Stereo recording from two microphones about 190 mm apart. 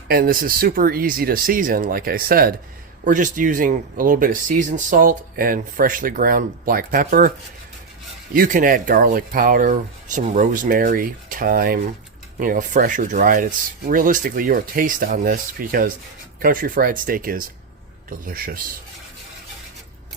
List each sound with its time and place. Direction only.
0.1 s speech: 50° right (ahead or behind)